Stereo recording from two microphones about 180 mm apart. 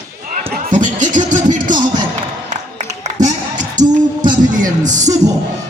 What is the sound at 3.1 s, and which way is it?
Music, 45° right (ahead or behind).